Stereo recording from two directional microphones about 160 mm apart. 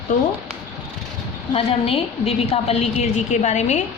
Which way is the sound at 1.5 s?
35° left (ahead or behind).